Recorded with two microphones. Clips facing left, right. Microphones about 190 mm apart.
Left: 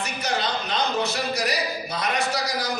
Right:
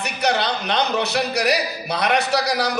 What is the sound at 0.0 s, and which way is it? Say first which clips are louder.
A man's voice: right 5 dB; 70° right (ahead or behind).